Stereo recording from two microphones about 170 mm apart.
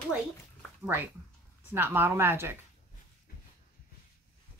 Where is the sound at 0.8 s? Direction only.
10° right (ahead or behind).